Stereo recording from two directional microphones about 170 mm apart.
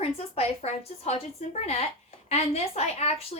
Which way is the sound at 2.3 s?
40° left (ahead or behind).